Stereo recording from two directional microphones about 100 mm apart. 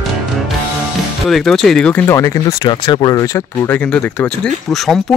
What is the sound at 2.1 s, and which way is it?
Speech, 30° left (ahead or behind).